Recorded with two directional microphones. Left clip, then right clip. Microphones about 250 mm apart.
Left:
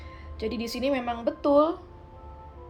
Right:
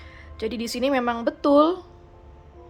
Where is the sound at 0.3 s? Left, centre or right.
Centre.